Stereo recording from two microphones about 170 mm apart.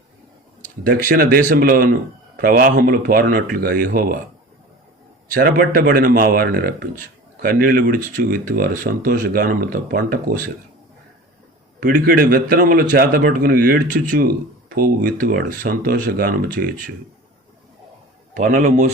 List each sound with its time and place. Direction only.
0.9 s a man's voice: 55° right (ahead or behind)
5.3 s a man's voice: 55° right (ahead or behind)
11.8 s a man's voice: 55° right (ahead or behind)
18.3 s a man's voice: 50° right (ahead or behind)